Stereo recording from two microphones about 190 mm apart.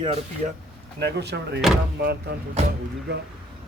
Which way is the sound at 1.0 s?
60° right (ahead or behind).